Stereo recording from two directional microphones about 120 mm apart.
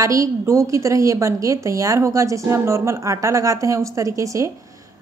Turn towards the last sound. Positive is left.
turn(degrees=-25)  # may be behind; listen again after turning